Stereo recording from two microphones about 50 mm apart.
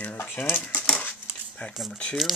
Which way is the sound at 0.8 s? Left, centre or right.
Left.